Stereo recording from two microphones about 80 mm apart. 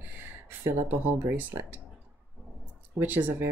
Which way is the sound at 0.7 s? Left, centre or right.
Right.